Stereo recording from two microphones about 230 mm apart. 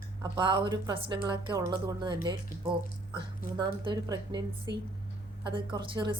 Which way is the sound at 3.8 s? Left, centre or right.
Centre.